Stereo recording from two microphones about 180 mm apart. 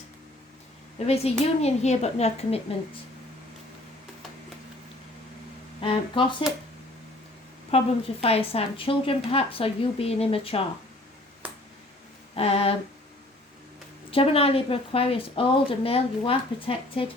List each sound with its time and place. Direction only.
0.9 s a woman's voice: 35° left (ahead or behind)
5.8 s speech: 30° left (ahead or behind)
7.7 s a woman's voice: 30° left (ahead or behind)
12.4 s a woman's voice: 35° left (ahead or behind)
14.1 s a woman's voice: 30° left (ahead or behind)